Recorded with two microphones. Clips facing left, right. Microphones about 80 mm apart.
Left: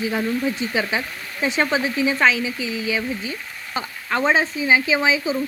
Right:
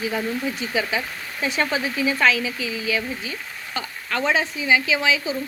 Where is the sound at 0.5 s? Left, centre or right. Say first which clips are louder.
Left 1 dB; left.